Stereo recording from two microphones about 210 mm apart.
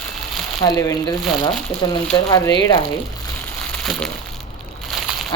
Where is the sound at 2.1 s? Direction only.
15° left (ahead or behind).